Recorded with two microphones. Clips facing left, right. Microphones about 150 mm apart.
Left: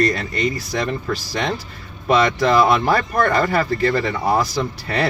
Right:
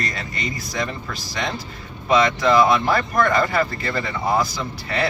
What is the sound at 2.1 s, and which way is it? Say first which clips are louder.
Speech: left 1 dB; 40° left (ahead or behind).